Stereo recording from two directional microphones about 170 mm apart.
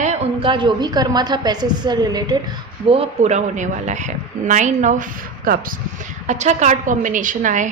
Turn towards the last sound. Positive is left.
turn(degrees=-50)  # may be behind; listen again after turning